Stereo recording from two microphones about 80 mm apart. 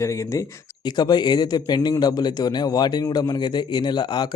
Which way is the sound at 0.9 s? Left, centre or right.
Left.